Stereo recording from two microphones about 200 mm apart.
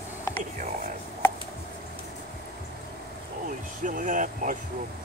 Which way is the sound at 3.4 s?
40° right (ahead or behind).